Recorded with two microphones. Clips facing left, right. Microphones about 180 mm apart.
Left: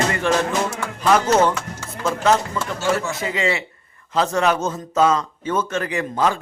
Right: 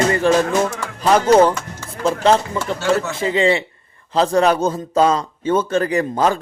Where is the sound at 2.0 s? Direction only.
30° right (ahead or behind).